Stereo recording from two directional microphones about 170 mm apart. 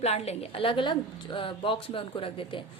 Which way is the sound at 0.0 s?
40° left (ahead or behind).